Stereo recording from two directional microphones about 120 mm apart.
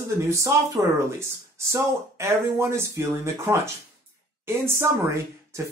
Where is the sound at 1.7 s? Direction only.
25° right (ahead or behind).